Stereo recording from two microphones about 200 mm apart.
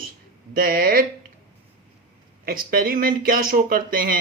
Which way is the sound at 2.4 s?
45° right (ahead or behind).